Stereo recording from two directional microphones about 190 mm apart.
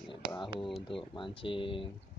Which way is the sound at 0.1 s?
25° left (ahead or behind).